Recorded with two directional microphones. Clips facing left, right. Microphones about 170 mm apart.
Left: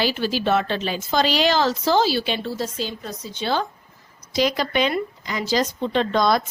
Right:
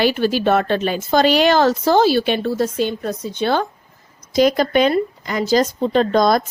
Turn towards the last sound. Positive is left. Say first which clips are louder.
# right 5 dB
turn(degrees=-45)  # may be behind; listen again after turning